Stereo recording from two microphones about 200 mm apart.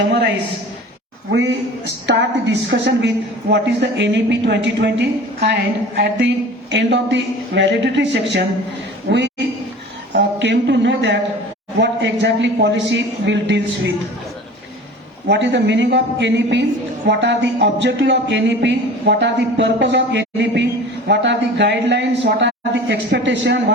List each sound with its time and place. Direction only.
1.3 s a woman's voice: 65° right (ahead or behind)
15.3 s speech: 60° right (ahead or behind)